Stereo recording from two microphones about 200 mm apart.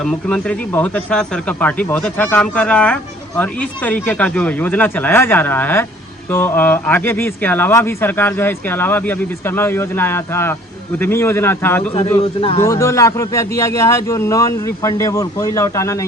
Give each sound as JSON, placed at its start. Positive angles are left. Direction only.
{"t": 0.0, "sound": "speech", "side_deg": 5}
{"t": 12.2, "sound": "speech", "side_deg": 30}
{"t": 12.6, "sound": "speech", "side_deg": 15}